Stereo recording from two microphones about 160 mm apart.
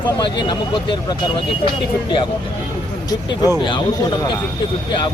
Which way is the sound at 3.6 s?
30° left (ahead or behind).